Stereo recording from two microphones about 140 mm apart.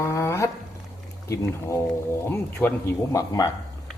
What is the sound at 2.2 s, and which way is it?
Speech, 15° left (ahead or behind).